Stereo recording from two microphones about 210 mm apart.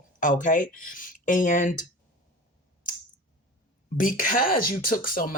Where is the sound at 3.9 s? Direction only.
40° left (ahead or behind).